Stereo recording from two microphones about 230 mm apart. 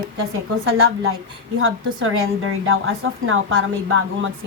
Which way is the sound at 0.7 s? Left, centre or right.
Right.